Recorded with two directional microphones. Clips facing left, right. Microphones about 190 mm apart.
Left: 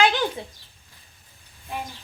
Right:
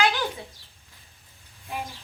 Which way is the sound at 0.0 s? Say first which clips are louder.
Left 4 dB; 15° left (ahead or behind).